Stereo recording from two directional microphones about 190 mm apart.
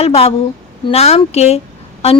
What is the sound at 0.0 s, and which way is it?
A woman's voice, 30° left (ahead or behind).